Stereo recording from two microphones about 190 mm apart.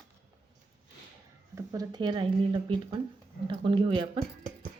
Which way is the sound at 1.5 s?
20° right (ahead or behind).